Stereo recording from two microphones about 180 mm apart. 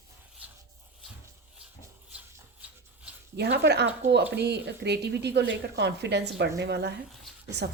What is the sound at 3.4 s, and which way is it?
A woman's voice, 70° right (ahead or behind).